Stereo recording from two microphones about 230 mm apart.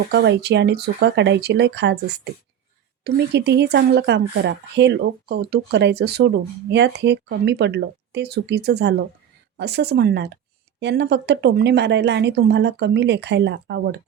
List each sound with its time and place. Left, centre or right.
0.1 s speech: right